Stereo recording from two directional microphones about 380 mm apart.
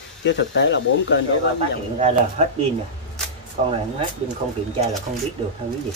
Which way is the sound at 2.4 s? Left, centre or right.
Centre.